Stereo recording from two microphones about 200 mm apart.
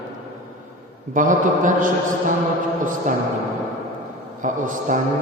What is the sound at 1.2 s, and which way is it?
Speech, 40° right (ahead or behind).